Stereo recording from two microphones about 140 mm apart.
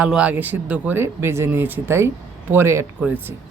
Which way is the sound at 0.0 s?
10° right (ahead or behind).